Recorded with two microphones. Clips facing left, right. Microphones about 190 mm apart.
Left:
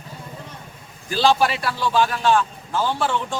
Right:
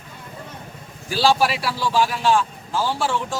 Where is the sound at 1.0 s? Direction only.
10° right (ahead or behind).